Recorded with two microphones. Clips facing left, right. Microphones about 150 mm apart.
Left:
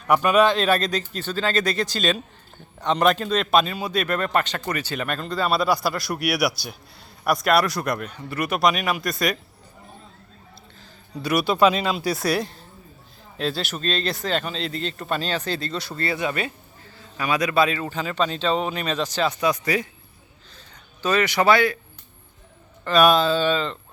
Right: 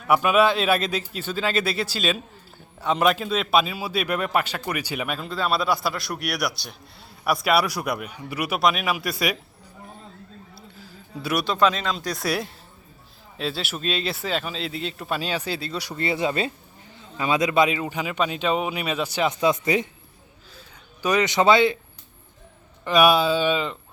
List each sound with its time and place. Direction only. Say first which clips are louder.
0.1 s a man's voice: left 1 dB; 5° right (ahead or behind)
10.5 s a sound: right 4 dB; 10° right (ahead or behind)
11.4 s a man's voice: left 3 dB; 10° left (ahead or behind); by 19.3 s 10° right (ahead or behind)
19.3 s speech: right 1 dB; 25° right (ahead or behind)
20.6 s speech: even; 15° right (ahead or behind)
22.8 s speech: left 1 dB; 10° right (ahead or behind)